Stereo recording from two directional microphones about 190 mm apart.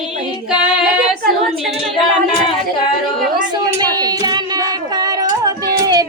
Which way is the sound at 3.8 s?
20° right (ahead or behind).